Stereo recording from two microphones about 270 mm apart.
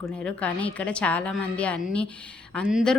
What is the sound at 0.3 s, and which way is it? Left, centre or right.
A woman's voice, centre.